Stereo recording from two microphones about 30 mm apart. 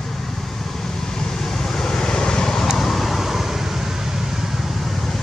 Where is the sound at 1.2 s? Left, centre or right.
Centre.